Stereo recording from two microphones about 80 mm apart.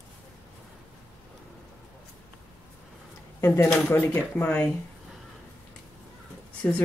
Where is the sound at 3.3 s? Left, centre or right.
Left.